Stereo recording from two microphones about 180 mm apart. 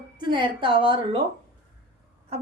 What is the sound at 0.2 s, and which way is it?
A woman's voice, 25° right (ahead or behind).